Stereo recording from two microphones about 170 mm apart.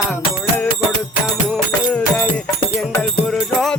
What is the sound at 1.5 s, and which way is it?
Music, 5° left (ahead or behind).